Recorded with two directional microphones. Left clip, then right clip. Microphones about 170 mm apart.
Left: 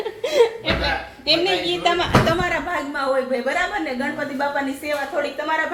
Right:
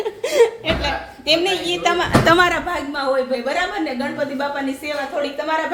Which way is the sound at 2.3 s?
65° right (ahead or behind).